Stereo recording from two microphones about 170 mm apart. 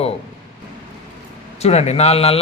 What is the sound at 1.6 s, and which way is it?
Speech, 40° left (ahead or behind).